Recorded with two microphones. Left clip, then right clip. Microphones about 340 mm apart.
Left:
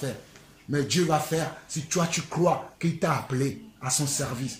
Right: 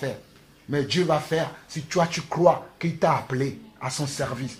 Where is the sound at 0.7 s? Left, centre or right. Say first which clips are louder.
Right 2 dB; centre.